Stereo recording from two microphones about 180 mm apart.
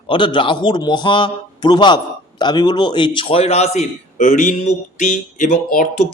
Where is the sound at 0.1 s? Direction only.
25° left (ahead or behind).